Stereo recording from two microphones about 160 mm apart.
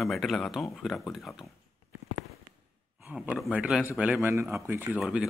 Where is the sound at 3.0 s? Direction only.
5° right (ahead or behind).